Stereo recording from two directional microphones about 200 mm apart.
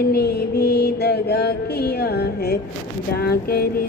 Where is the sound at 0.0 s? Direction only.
50° left (ahead or behind).